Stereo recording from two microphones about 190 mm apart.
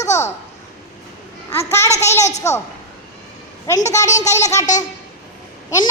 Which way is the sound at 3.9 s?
15° left (ahead or behind).